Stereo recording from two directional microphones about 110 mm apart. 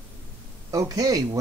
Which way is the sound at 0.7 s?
35° right (ahead or behind).